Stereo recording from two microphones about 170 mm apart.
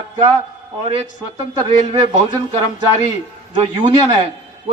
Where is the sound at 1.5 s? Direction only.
25° right (ahead or behind).